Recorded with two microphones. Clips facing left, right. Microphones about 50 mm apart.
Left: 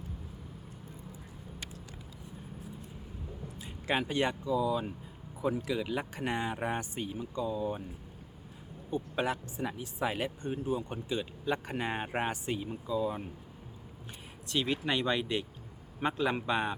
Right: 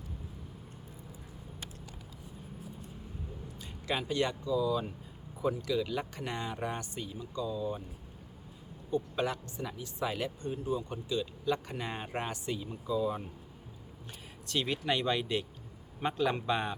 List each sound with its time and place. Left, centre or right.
3.6 s a sound: left
4.1 s speech: left
8.9 s speech: left
12.9 s a man's voice: centre
14.4 s a man's voice: centre